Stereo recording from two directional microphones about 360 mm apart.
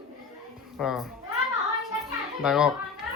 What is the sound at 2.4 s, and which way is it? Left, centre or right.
Speech, centre.